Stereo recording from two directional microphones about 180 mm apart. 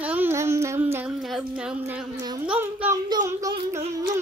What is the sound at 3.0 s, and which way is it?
Speech, 20° right (ahead or behind).